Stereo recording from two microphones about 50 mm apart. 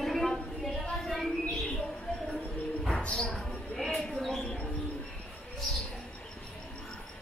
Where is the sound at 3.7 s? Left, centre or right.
Centre.